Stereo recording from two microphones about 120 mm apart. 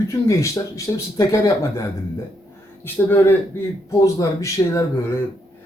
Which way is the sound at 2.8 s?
15° left (ahead or behind).